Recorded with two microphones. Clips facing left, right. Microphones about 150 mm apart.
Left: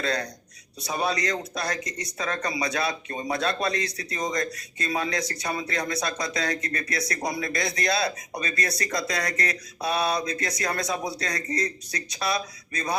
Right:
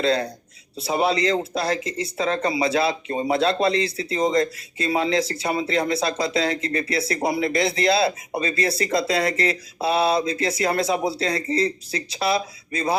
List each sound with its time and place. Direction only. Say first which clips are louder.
0.0 s speech: right 7 dB; 25° right (ahead or behind)